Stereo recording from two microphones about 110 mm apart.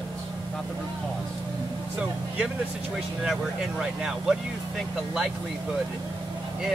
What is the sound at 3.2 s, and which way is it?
Speech, 5° right (ahead or behind).